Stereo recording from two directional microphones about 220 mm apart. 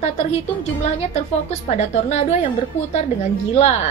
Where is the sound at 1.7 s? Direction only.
30° left (ahead or behind).